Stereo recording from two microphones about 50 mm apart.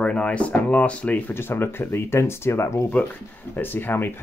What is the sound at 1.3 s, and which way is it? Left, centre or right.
Speech, left.